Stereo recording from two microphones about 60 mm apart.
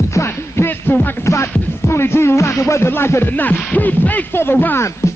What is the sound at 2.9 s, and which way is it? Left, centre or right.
Music, left.